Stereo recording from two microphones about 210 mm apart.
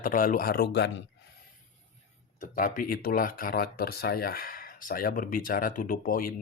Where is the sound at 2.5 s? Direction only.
40° left (ahead or behind).